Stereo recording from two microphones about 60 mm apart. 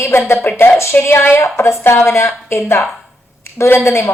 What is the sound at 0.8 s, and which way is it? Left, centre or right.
A woman's voice, left.